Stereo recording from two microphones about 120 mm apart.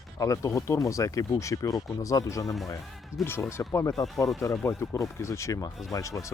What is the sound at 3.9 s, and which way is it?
Speech, centre (ahead or behind).